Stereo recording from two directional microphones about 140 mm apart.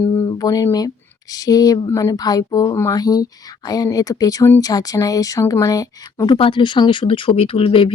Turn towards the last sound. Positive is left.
turn(degrees=40)  # may be behind; listen again after turning